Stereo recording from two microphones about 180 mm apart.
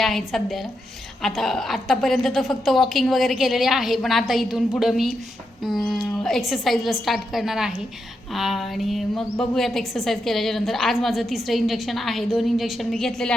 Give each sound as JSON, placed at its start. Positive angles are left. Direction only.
{"t": 0.0, "sound": "a woman's voice", "side_deg": 0}